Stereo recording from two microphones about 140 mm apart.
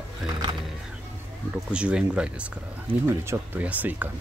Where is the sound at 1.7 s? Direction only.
10° right (ahead or behind).